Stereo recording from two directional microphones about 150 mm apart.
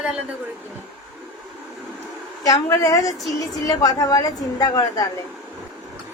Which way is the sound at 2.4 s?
20° left (ahead or behind).